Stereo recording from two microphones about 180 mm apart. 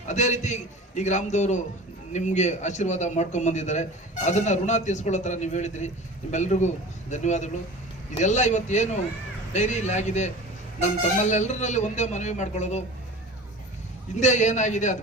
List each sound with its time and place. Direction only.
0.1 s a man's voice: 40° left (ahead or behind)
14.2 s a man's voice: 40° left (ahead or behind)